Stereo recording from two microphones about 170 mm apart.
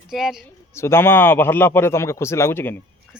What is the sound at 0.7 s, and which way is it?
A man's voice, 15° left (ahead or behind).